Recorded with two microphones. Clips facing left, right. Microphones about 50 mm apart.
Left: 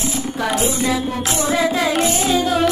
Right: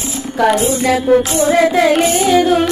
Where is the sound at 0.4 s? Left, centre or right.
Right.